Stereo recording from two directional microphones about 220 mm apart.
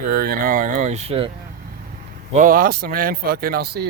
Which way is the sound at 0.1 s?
40° right (ahead or behind).